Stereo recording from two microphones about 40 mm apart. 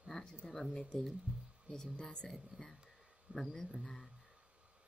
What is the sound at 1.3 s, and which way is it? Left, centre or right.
Speech, right.